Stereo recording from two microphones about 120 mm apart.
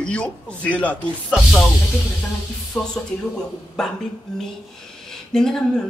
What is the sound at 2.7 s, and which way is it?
Speech, 5° left (ahead or behind).